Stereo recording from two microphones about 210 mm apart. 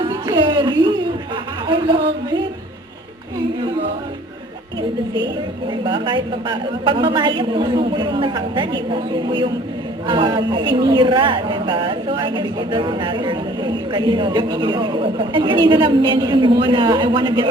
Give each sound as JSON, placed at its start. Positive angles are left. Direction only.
{"t": 0.0, "sound": "a sound", "side_deg": -20}
{"t": 1.6, "sound": "a woman's voice", "side_deg": -20}
{"t": 5.8, "sound": "a woman's voice", "side_deg": -20}